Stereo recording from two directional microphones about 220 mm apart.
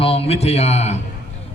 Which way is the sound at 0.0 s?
25° left (ahead or behind).